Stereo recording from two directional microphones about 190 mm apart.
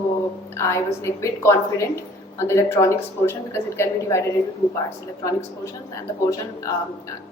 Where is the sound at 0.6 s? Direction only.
15° left (ahead or behind).